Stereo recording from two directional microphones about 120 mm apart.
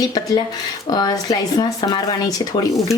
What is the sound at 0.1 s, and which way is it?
Speech, 35° left (ahead or behind).